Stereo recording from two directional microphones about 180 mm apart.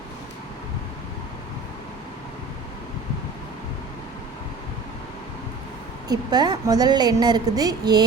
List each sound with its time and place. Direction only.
6.1 s a woman's voice: 25° right (ahead or behind)